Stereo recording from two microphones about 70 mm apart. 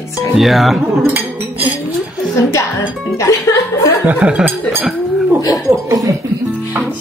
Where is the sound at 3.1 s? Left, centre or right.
Left.